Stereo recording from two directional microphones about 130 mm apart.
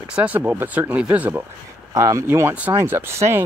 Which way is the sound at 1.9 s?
25° right (ahead or behind).